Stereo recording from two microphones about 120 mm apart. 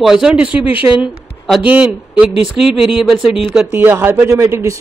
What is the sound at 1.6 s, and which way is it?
A man's voice, 10° right (ahead or behind).